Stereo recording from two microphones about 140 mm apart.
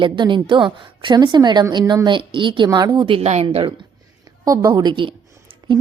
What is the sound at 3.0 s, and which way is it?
Speech, 50° right (ahead or behind).